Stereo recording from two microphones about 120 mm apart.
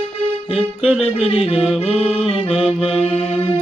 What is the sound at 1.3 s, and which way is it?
Music, 50° left (ahead or behind).